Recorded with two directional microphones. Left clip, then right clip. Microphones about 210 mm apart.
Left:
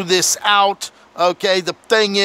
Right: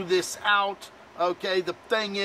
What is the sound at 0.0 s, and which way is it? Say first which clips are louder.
Speech: left 9 dB; 50° left (ahead or behind).